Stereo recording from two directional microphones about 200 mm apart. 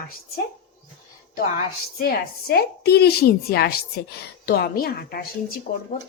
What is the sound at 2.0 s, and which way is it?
A woman's voice, 50° left (ahead or behind).